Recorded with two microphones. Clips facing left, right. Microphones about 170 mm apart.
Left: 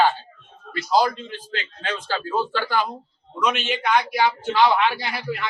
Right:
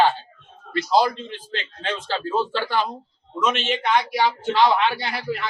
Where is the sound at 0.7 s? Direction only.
25° right (ahead or behind).